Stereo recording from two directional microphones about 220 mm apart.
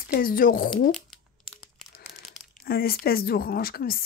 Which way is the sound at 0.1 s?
40° left (ahead or behind).